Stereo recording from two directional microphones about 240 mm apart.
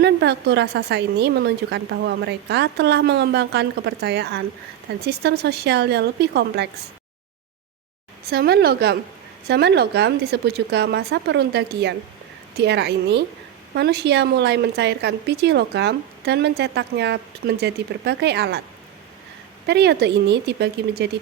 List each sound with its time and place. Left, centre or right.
0.0 s speech: right
8.3 s a woman's voice: right
19.6 s speech: right